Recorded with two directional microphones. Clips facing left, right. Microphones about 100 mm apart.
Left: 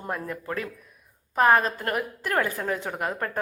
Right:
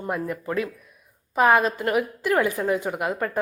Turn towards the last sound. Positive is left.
turn(degrees=-10)  # may be behind; listen again after turning